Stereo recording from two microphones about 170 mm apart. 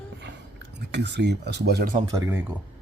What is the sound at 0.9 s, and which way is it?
Speech, 90° right.